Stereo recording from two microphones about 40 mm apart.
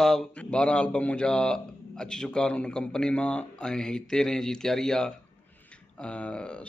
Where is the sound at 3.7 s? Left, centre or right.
Centre.